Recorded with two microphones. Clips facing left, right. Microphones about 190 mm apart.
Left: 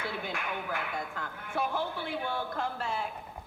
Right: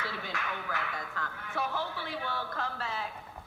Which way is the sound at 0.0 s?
55° left (ahead or behind).